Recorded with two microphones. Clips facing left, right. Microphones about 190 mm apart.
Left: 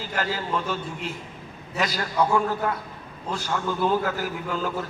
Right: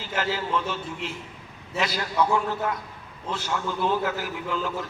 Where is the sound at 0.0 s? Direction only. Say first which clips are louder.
Even; 45° left (ahead or behind).